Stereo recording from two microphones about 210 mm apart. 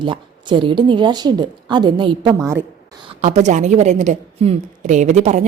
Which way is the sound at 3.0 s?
35° right (ahead or behind).